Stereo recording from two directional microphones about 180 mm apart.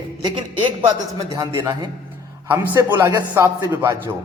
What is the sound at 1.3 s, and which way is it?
A man's voice, 20° right (ahead or behind).